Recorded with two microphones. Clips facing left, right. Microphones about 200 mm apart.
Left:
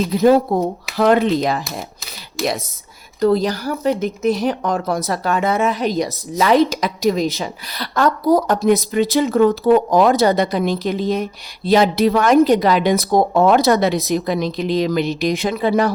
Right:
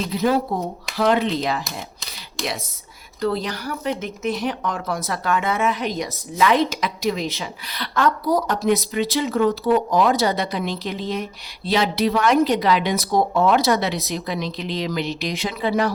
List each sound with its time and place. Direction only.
0.1 s speech: 45° left (ahead or behind)
3.2 s speech: 40° left (ahead or behind)